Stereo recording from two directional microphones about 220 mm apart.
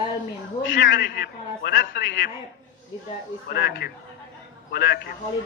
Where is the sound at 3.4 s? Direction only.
50° left (ahead or behind).